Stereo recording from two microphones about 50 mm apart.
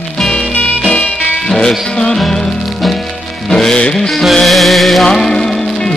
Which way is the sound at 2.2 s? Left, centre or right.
Centre.